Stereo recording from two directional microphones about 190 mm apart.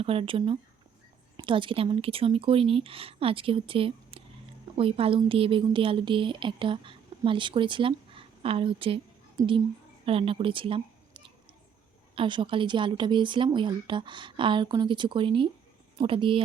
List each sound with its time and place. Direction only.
0.0 s speech: 30° right (ahead or behind)
10.1 s a woman's voice: 30° right (ahead or behind)